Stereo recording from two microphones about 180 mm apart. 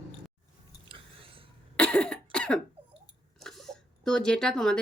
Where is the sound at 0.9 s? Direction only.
30° right (ahead or behind).